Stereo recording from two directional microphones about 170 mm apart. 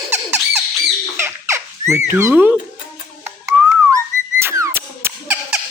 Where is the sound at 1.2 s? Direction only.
15° right (ahead or behind).